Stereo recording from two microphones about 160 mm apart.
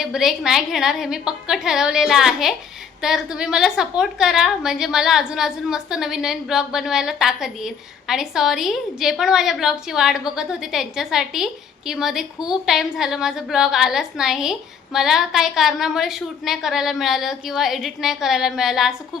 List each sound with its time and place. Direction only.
0.0 s a woman's voice: 5° right (ahead or behind)